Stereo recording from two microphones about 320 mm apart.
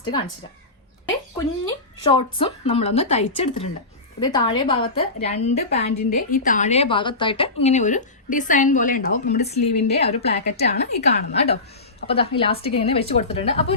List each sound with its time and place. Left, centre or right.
0.0 s speech: centre
2.0 s a woman's voice: centre